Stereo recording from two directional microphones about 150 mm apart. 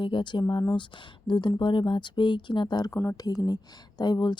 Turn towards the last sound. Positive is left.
turn(degrees=30)  # may be behind; listen again after turning